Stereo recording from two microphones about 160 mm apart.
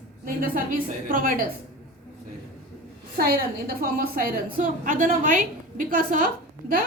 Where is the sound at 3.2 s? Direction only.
70° right (ahead or behind).